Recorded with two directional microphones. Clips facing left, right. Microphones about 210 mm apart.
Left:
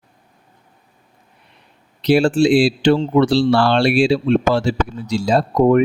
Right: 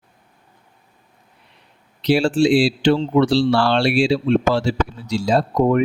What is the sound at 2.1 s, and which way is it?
Speech, 50° left (ahead or behind).